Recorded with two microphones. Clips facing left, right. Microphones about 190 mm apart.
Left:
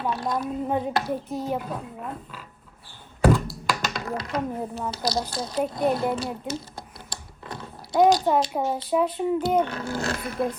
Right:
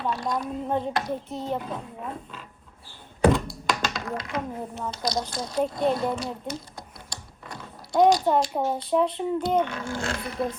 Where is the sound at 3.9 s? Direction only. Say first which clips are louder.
Left 2 dB; 40° left (ahead or behind).